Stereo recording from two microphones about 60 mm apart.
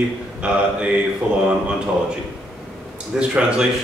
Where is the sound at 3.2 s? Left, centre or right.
Centre.